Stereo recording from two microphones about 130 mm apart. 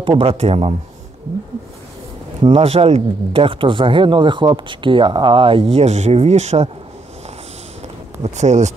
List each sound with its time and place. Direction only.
0.0 s speech: 45° right (ahead or behind)
2.4 s speech: 55° right (ahead or behind)
8.2 s speech: 60° right (ahead or behind)